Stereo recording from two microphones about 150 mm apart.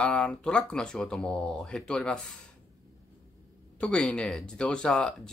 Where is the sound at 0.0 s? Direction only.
5° left (ahead or behind).